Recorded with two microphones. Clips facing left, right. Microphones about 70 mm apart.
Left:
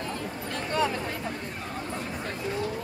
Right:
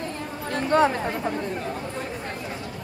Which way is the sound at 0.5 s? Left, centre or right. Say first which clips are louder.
Right 8 dB; right.